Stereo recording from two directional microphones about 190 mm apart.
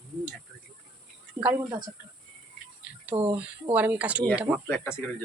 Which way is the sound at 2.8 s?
10° right (ahead or behind).